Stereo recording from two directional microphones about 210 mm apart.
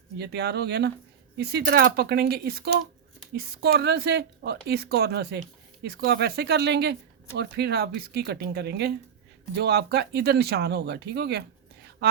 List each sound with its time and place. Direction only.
0.2 s a woman's voice: 50° right (ahead or behind)